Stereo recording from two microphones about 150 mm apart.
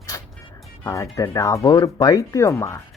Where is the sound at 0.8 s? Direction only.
20° left (ahead or behind).